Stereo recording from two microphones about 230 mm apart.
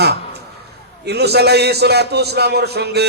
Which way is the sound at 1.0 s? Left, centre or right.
Right.